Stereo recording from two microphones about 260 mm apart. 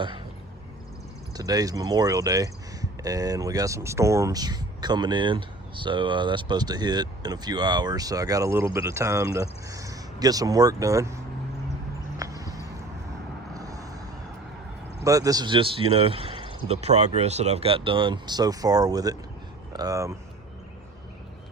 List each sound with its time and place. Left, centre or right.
1.4 s speech: centre
12.1 s horse: centre
13.5 s vehicle: centre
15.0 s speech: centre